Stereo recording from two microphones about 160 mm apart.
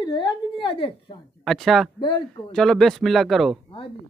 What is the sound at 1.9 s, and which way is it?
Speech, 30° left (ahead or behind).